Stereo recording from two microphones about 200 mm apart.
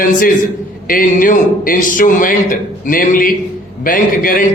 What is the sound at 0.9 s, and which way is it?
A man's voice, 45° left (ahead or behind).